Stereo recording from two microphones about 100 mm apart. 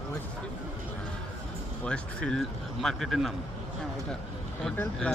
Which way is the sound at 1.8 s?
10° left (ahead or behind).